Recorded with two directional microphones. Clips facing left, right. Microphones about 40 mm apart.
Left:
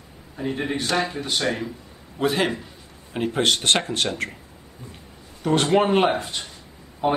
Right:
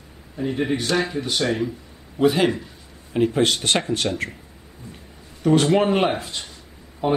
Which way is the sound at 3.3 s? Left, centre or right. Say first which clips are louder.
Even; left.